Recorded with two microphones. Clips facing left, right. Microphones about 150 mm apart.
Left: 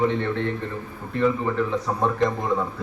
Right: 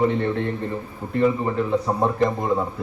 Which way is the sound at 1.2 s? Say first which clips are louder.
Right 1 dB; 25° right (ahead or behind).